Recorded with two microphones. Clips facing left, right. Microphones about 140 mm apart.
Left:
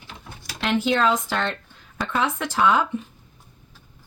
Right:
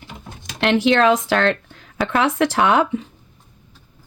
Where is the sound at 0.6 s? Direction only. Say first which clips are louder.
Right 6 dB; 80° right.